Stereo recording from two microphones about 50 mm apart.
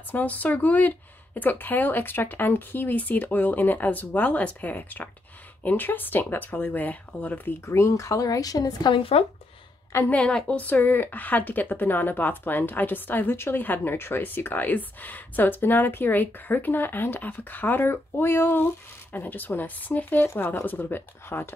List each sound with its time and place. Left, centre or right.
0.1 s speech: left
7.6 s a woman's voice: left
10.0 s a woman's voice: left
20.2 s speech: left